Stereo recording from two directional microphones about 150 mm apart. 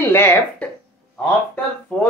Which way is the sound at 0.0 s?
15° left (ahead or behind).